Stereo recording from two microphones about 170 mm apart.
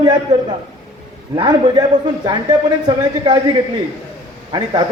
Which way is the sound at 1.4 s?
25° right (ahead or behind).